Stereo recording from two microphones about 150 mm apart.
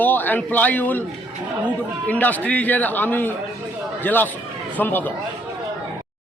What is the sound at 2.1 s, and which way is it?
A man's voice, 10° left (ahead or behind).